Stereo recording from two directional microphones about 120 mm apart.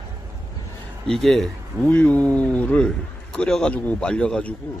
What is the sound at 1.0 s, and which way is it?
A man's voice, 5° left (ahead or behind).